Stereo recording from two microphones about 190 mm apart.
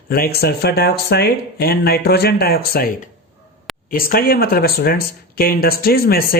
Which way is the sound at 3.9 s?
50° left (ahead or behind).